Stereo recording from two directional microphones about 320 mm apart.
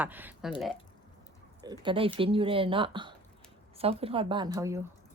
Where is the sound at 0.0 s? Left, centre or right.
Centre.